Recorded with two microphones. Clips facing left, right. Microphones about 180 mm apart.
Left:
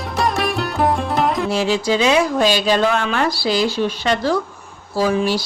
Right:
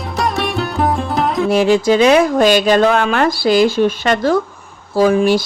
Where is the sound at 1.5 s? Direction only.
55° right (ahead or behind).